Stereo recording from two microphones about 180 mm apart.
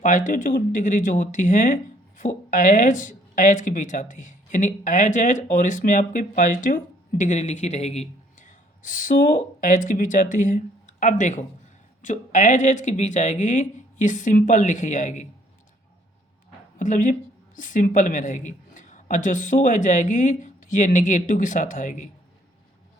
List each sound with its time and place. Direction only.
0.0 s speech: 45° left (ahead or behind)
16.7 s a woman's voice: 45° left (ahead or behind)